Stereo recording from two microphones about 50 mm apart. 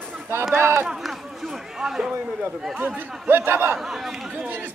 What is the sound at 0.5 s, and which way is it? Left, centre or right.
Speech, right.